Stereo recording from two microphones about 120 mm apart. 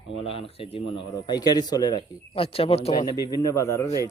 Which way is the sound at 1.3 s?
35° left (ahead or behind).